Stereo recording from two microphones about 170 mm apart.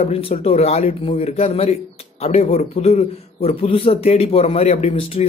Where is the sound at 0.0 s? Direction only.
35° left (ahead or behind).